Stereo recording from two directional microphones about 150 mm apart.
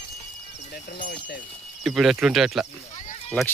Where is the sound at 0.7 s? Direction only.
70° left (ahead or behind).